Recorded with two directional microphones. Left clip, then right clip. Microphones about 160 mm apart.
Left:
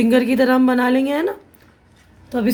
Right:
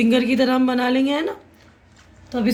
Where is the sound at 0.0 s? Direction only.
70° left (ahead or behind).